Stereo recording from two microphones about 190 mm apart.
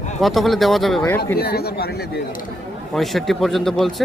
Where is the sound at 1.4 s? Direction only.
55° left (ahead or behind).